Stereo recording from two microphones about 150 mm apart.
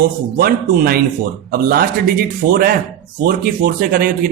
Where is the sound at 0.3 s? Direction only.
75° right (ahead or behind).